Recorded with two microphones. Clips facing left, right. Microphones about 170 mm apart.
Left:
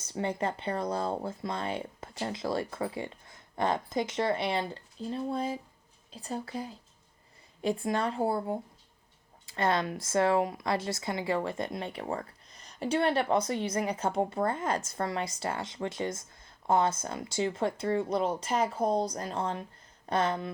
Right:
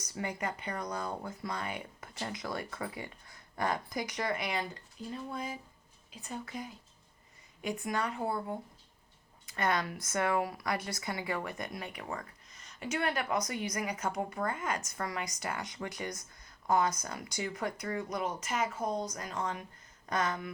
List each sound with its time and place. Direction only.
0.0 s speech: 30° left (ahead or behind)